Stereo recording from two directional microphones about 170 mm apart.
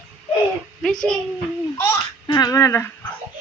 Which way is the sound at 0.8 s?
Centre (ahead or behind).